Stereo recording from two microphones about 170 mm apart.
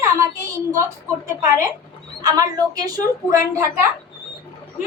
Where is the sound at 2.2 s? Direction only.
20° right (ahead or behind).